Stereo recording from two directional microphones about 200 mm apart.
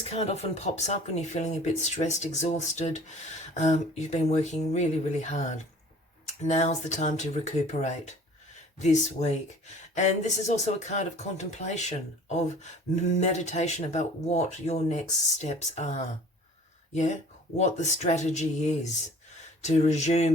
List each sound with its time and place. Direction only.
0.0 s speech: 30° left (ahead or behind)